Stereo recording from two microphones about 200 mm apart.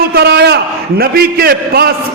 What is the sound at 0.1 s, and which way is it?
A man's voice, 55° right (ahead or behind).